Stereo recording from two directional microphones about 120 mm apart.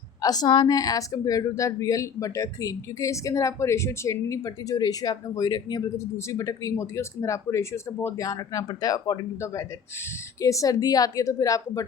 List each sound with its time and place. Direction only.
0.2 s a woman's voice: 30° left (ahead or behind)
6.0 s a woman's voice: 25° left (ahead or behind)